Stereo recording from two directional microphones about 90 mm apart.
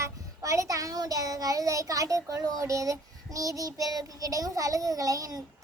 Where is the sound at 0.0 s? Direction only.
35° right (ahead or behind).